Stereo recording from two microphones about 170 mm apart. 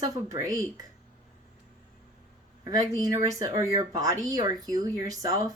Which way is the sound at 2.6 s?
20° right (ahead or behind).